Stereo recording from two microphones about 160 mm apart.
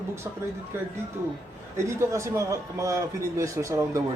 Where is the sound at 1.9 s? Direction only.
20° right (ahead or behind).